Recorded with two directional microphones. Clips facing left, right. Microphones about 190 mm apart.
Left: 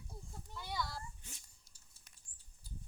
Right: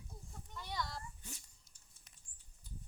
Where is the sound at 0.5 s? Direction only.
5° left (ahead or behind).